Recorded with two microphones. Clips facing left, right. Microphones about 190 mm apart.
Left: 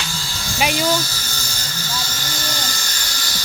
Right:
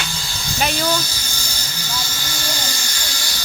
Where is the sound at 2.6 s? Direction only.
10° right (ahead or behind).